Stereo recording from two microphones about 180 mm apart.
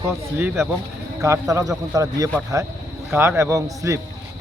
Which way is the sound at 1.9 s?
20° right (ahead or behind).